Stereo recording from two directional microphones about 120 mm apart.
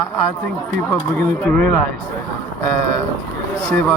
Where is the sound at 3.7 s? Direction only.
15° left (ahead or behind).